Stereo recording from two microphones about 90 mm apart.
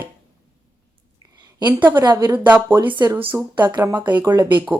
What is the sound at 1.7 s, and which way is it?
A woman's voice, 20° right (ahead or behind).